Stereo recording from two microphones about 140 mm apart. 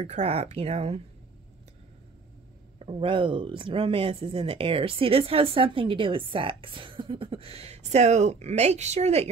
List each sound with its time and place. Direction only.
0.0 s speech: 50° right (ahead or behind)
2.8 s speech: 40° right (ahead or behind)